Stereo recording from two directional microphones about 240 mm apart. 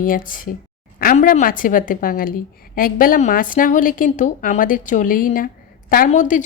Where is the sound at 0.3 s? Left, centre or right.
Left.